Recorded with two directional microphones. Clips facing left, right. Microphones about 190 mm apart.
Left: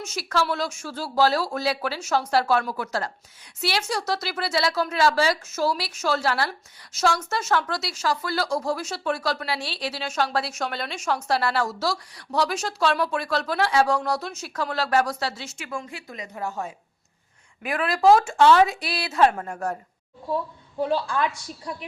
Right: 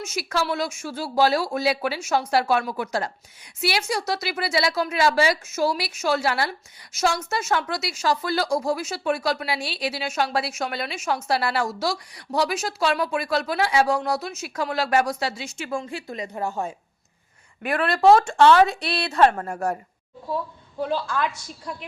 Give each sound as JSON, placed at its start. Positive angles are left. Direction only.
{"t": 0.0, "sound": "speech", "side_deg": -10}
{"t": 8.0, "sound": "speech", "side_deg": -20}
{"t": 15.5, "sound": "a woman's voice", "side_deg": -30}
{"t": 17.6, "sound": "a woman's voice", "side_deg": 0}
{"t": 21.6, "sound": "a woman's voice", "side_deg": 10}